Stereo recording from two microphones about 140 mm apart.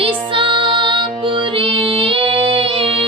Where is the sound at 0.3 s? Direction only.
35° right (ahead or behind).